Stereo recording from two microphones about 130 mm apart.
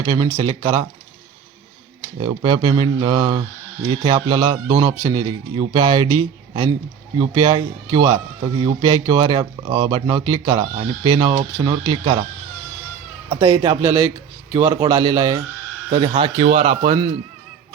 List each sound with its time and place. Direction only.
0.0 s speech: 35° right (ahead or behind)
2.0 s a man's voice: 35° right (ahead or behind)
13.5 s a man's voice: 25° right (ahead or behind)
15.9 s speech: 40° right (ahead or behind)